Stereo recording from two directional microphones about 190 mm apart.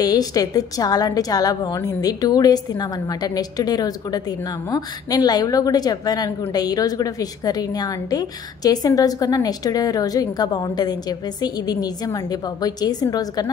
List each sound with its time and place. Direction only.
0.0 s a woman's voice: 20° left (ahead or behind)